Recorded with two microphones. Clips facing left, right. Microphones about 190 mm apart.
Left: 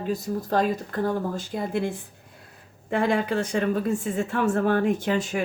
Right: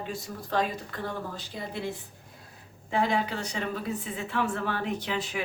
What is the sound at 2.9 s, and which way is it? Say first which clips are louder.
Speech: left 4 dB; 50° left (ahead or behind).